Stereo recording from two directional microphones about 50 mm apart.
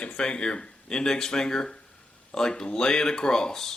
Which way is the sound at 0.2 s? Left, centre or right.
Centre.